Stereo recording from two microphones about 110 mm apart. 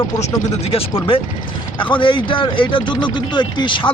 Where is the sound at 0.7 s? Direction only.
55° left (ahead or behind).